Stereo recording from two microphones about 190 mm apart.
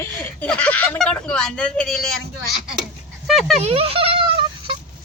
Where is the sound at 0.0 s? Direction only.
5° left (ahead or behind).